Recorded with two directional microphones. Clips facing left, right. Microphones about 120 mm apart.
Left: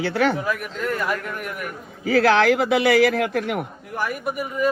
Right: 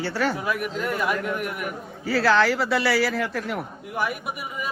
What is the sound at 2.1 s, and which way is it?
A man's voice, 60° left (ahead or behind).